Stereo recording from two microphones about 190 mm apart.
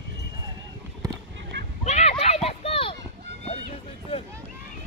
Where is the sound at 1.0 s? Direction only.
20° right (ahead or behind).